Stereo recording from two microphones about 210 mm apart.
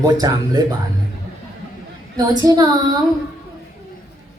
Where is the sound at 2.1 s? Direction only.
20° right (ahead or behind).